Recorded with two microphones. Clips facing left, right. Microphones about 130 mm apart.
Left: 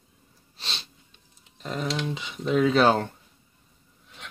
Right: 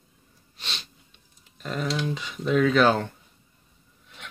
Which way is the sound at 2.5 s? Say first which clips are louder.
Even; 30° left (ahead or behind).